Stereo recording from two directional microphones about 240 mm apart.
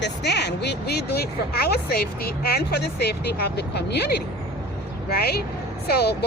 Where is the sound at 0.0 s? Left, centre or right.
Left.